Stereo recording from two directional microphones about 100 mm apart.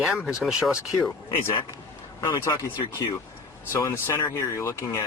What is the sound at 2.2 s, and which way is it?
Speech, 35° left (ahead or behind).